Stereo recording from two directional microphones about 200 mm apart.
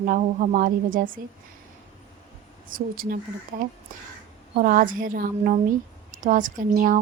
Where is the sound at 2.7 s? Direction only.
45° right (ahead or behind).